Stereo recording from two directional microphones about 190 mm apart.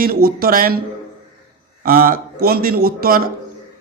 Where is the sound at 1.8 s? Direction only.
50° right (ahead or behind).